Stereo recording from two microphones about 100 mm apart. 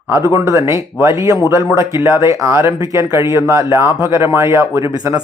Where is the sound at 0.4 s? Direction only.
25° right (ahead or behind).